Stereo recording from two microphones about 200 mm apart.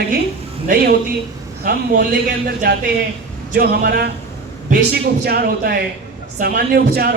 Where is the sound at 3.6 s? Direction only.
50° right (ahead or behind).